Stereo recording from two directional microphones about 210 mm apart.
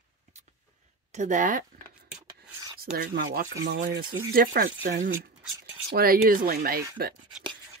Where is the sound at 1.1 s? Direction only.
35° right (ahead or behind).